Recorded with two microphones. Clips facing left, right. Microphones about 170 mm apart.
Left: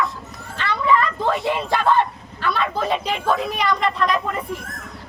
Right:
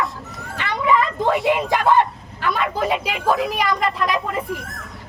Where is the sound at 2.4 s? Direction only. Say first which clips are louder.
Right 1 dB; 15° right (ahead or behind).